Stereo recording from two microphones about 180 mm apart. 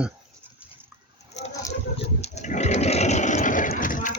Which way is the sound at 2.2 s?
40° left (ahead or behind).